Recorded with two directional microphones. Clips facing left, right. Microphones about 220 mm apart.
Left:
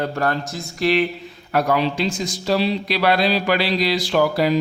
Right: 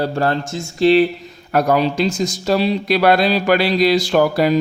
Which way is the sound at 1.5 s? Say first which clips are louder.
Right 3 dB; 40° right (ahead or behind).